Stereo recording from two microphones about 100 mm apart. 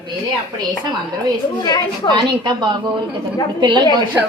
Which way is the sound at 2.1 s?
50° right (ahead or behind).